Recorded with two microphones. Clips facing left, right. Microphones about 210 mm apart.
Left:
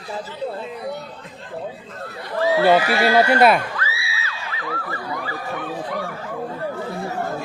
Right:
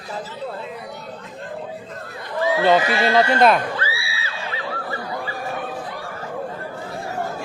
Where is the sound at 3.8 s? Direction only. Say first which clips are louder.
Right 2 dB; 30° right (ahead or behind).